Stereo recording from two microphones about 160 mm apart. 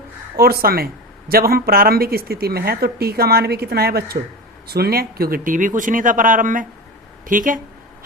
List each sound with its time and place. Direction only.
0.3 s speech: 70° right (ahead or behind)